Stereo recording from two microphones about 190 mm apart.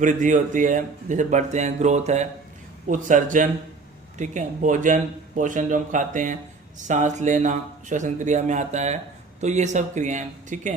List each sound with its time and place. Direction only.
0.0 s a man's voice: 40° right (ahead or behind)